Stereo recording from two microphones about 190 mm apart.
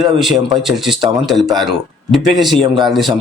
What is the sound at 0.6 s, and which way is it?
Speech, centre (ahead or behind).